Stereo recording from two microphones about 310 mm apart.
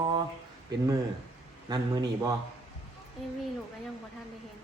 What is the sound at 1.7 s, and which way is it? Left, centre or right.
Speech, centre.